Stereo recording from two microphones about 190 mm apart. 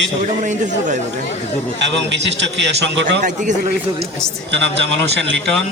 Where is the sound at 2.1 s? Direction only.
65° right (ahead or behind).